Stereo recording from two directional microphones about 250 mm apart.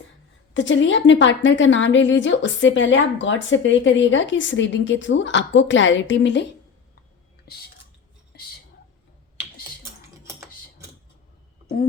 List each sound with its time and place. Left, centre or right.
0.5 s a woman's voice: left
7.4 s a sound: left
8.3 s whispering: left
10.2 s typing: centre